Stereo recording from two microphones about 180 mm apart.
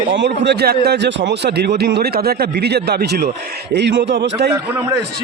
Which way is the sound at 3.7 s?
75° right (ahead or behind).